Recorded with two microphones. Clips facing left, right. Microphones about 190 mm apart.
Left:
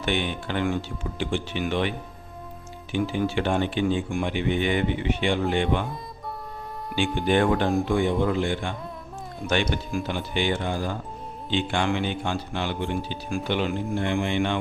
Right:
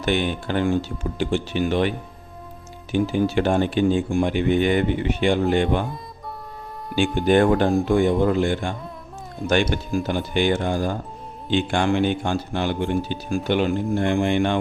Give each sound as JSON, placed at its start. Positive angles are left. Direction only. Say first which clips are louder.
{"t": 0.0, "sound": "speech", "louder": "right 4 dB", "side_deg": -40}
{"t": 2.9, "sound": "a man's voice", "louder": "right 5 dB", "side_deg": -40}
{"t": 6.9, "sound": "a man's voice", "louder": "right 5 dB", "side_deg": -45}